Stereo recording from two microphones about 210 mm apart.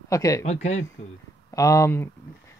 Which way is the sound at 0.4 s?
30° left (ahead or behind).